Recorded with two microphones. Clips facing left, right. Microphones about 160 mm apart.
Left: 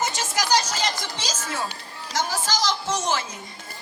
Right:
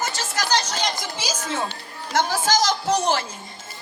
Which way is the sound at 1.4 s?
25° right (ahead or behind).